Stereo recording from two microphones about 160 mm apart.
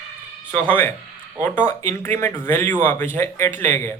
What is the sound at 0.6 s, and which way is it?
Speech, 10° left (ahead or behind).